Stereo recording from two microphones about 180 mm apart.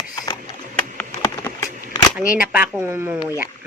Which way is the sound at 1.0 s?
20° left (ahead or behind).